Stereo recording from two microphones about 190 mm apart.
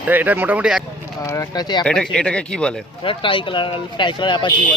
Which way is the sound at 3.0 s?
25° left (ahead or behind).